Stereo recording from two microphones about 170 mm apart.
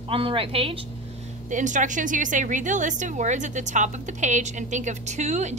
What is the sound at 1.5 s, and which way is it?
A woman's voice, 45° right (ahead or behind).